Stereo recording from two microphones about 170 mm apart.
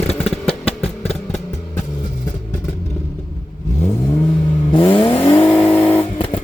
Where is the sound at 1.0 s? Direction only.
40° left (ahead or behind).